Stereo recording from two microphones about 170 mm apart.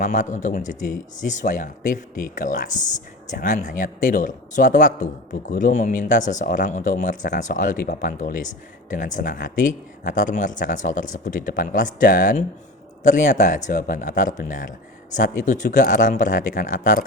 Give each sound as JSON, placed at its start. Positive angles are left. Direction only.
{"t": 0.0, "sound": "speech", "side_deg": 50}